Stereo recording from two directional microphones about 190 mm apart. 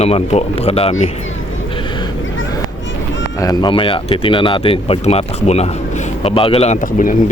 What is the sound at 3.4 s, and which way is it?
Speech, 20° left (ahead or behind).